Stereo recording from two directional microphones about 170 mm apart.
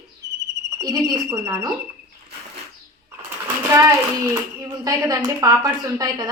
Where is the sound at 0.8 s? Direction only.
20° right (ahead or behind).